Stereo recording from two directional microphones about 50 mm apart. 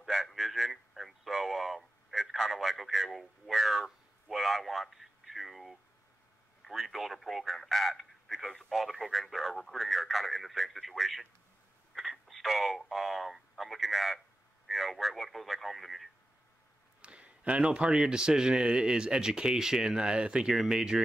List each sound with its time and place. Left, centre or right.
0.0 s a sound: centre
14.7 s radio: centre
17.0 s a man's voice: right